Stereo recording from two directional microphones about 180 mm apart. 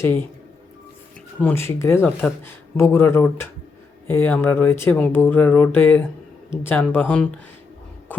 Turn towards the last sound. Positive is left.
turn(degrees=10)  # may be behind; listen again after turning